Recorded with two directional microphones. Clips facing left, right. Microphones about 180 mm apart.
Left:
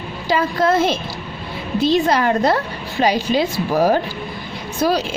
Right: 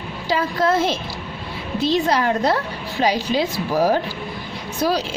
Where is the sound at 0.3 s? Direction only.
50° left (ahead or behind).